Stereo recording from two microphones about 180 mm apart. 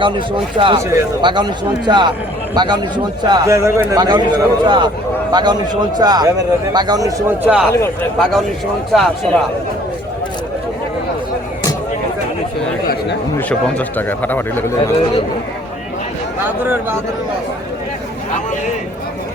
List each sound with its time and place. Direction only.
0.5 s a man's voice: 25° right (ahead or behind); by 9.4 s centre (ahead or behind)
13.5 s a man's voice: 10° left (ahead or behind)